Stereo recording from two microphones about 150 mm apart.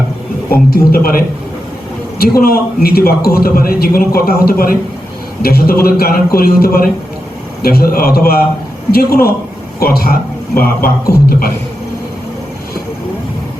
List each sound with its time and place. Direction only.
0.5 s a man's voice: 90° left
2.1 s a man's voice: 90° left
11.1 s beatboxing: 75° left (ahead or behind)